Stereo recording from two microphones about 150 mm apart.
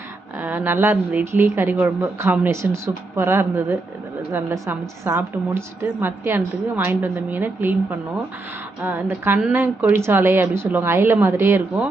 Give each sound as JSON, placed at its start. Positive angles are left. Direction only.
{"t": 0.3, "sound": "a woman's voice", "side_deg": -10}